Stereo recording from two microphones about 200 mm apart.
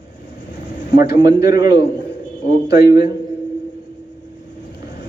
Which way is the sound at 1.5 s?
20° right (ahead or behind).